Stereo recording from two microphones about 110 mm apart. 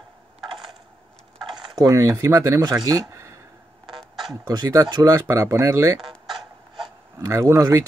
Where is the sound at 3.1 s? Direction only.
25° right (ahead or behind).